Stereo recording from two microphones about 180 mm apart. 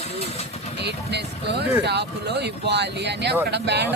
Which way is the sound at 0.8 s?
65° right (ahead or behind).